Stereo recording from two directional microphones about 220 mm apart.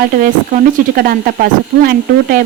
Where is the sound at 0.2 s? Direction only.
40° right (ahead or behind).